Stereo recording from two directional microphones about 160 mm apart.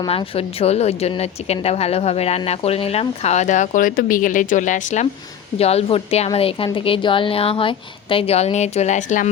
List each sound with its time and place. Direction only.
0.0 s speech: 35° left (ahead or behind); by 5.0 s 50° left (ahead or behind)
5.5 s speech: 40° left (ahead or behind)